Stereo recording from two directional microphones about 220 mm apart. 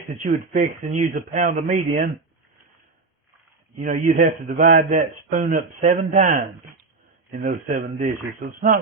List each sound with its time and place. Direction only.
0.2 s a man's voice: 35° right (ahead or behind)
3.8 s a man's voice: 35° right (ahead or behind)